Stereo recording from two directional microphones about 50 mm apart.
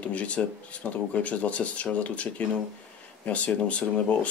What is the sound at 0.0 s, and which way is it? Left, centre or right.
Speech, left.